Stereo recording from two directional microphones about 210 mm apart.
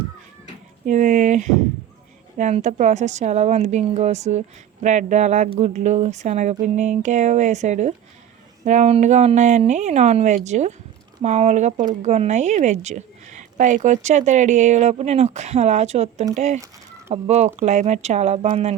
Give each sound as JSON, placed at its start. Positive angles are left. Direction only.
{"t": 0.9, "sound": "a woman's voice", "side_deg": -35}